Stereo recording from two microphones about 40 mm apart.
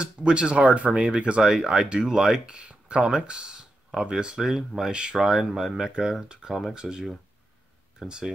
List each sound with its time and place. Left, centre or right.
0.0 s speech: right
1.4 s speech: centre
4.4 s speech: centre